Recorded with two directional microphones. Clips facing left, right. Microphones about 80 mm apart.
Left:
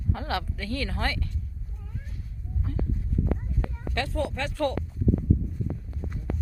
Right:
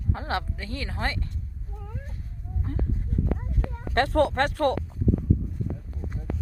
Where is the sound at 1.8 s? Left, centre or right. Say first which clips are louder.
Right 2 dB; right.